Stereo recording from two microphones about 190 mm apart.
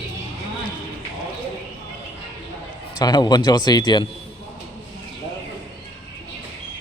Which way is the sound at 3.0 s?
20° left (ahead or behind).